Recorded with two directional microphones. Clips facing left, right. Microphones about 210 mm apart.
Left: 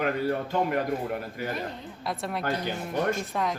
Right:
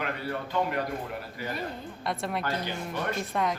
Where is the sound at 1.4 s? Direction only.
50° left (ahead or behind).